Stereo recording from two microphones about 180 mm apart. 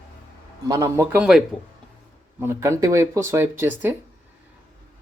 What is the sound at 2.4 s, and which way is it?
Speech, 15° right (ahead or behind).